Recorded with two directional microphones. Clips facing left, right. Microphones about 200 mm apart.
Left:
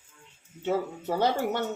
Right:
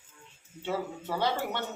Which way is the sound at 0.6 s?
45° left (ahead or behind).